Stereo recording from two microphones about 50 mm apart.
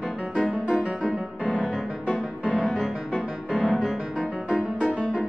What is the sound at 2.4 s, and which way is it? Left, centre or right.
Music, left.